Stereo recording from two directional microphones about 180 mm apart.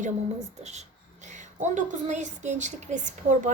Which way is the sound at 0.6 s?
40° right (ahead or behind).